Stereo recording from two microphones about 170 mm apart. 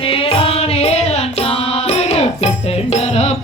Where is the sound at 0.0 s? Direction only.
35° left (ahead or behind).